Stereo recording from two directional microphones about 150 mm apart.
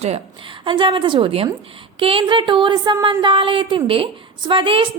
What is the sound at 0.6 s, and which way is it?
A woman's voice, 35° right (ahead or behind).